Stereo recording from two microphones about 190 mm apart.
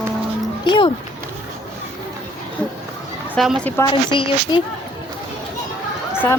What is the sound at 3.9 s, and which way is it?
Speech, 25° left (ahead or behind).